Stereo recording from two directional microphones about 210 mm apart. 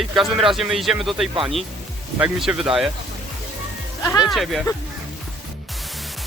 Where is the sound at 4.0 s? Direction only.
15° left (ahead or behind).